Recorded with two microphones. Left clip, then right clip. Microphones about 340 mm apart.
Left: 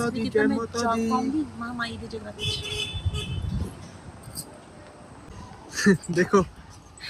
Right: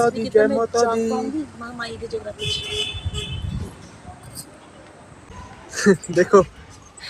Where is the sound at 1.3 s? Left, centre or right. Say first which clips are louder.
Even; centre.